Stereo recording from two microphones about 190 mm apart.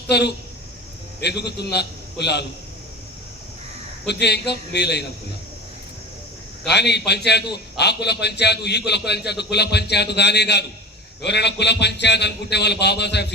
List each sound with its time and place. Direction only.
0.1 s a man's voice: 60° left (ahead or behind)
4.0 s a man's voice: 60° left (ahead or behind)
6.7 s a man's voice: 60° left (ahead or behind)